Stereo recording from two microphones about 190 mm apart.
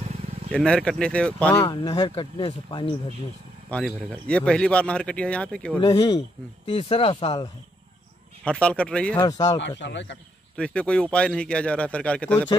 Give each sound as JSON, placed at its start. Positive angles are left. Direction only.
{"t": 0.5, "sound": "speech", "side_deg": 5}
{"t": 1.5, "sound": "speech", "side_deg": 20}
{"t": 3.7, "sound": "speech", "side_deg": 5}
{"t": 5.8, "sound": "speech", "side_deg": 25}
{"t": 8.5, "sound": "speech", "side_deg": 5}
{"t": 9.2, "sound": "speech", "side_deg": 20}
{"t": 9.6, "sound": "speech", "side_deg": 65}
{"t": 10.5, "sound": "speech", "side_deg": 5}